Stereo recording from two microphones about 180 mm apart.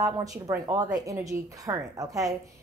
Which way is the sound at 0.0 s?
20° right (ahead or behind).